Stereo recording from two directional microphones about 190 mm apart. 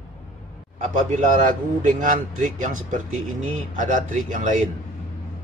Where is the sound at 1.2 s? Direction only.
40° right (ahead or behind).